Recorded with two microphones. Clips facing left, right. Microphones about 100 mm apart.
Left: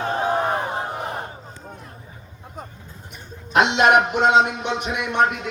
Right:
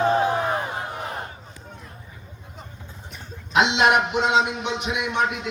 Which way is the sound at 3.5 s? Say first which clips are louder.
Left 3 dB; 50° left (ahead or behind).